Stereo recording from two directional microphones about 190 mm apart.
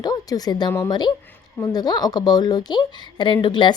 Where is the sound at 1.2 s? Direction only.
10° left (ahead or behind).